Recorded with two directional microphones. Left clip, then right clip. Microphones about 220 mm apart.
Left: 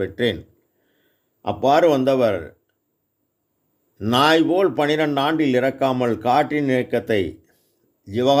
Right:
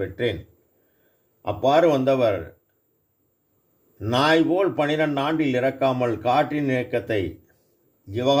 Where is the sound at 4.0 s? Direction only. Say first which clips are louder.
Left 3 dB; 40° left (ahead or behind).